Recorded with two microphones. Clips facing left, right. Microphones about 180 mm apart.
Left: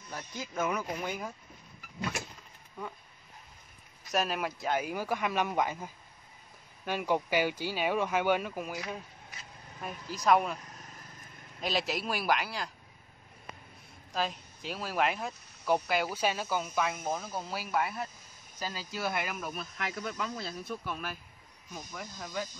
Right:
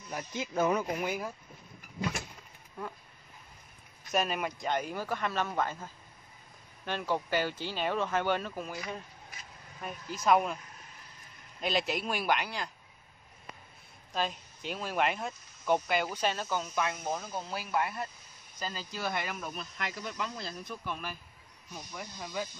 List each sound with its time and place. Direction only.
0.1 s speech: 20° right (ahead or behind)
0.9 s speech: 5° right (ahead or behind)
4.0 s speech: centre (ahead or behind)
10.1 s speech: centre (ahead or behind)
11.6 s speech: centre (ahead or behind)
14.1 s speech: centre (ahead or behind)